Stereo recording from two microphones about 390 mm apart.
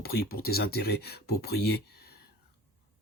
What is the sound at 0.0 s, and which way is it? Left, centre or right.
Speech, left.